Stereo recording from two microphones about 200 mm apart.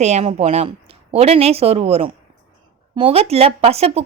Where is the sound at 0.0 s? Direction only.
35° right (ahead or behind).